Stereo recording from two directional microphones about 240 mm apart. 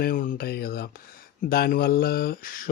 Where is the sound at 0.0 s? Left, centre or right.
Left.